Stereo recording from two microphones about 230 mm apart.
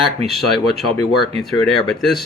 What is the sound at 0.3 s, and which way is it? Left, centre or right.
Speech, centre.